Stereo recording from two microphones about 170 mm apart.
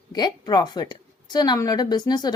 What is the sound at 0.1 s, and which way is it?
A woman's voice, 25° left (ahead or behind).